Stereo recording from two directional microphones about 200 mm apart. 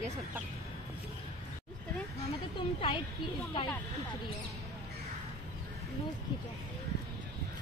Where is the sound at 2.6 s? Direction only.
25° left (ahead or behind).